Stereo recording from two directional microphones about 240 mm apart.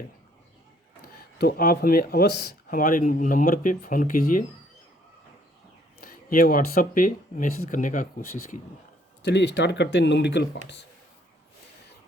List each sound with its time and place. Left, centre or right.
1.0 s speech: left
6.0 s speech: left
9.2 s speech: left